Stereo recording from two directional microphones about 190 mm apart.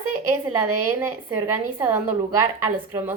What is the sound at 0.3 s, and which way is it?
A woman's voice, 15° right (ahead or behind).